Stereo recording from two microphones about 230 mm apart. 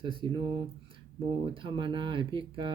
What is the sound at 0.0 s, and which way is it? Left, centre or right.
Speech, right.